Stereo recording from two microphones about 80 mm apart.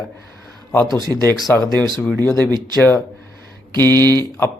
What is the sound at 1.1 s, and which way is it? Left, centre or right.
Speech, left.